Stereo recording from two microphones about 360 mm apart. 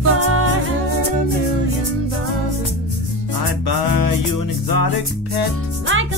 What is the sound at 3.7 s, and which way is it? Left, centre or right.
Music, left.